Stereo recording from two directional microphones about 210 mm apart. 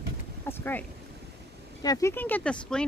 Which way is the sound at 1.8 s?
15° left (ahead or behind).